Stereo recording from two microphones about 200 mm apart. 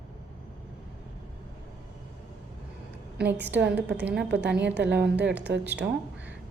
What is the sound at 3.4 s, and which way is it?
A woman's voice, 60° right (ahead or behind).